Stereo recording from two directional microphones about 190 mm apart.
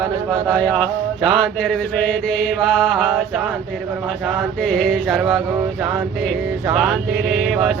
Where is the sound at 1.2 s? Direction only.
5° right (ahead or behind).